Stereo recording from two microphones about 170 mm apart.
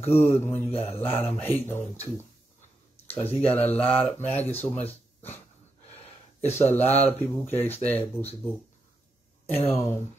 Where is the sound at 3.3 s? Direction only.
35° left (ahead or behind).